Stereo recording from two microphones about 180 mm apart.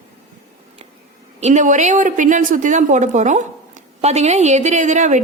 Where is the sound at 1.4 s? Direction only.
40° right (ahead or behind).